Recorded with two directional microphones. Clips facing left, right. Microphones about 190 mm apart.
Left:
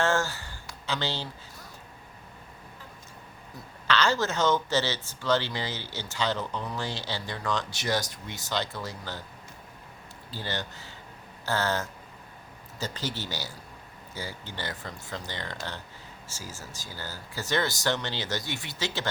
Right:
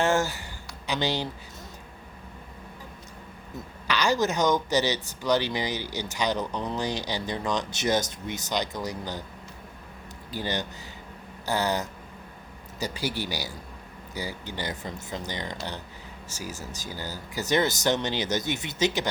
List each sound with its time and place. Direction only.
0.0 s speech: 15° right (ahead or behind)
3.8 s speech: 15° right (ahead or behind)
10.3 s speech: 15° right (ahead or behind)